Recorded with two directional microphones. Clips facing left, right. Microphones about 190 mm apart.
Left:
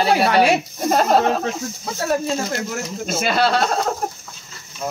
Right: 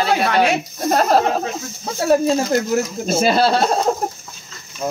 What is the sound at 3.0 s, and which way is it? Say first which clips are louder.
Speech: right 2 dB; 30° right (ahead or behind).